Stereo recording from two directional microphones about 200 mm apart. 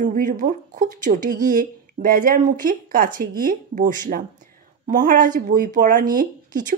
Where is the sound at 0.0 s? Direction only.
40° right (ahead or behind).